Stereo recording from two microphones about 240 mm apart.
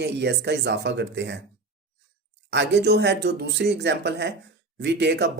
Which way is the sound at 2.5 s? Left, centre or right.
Right.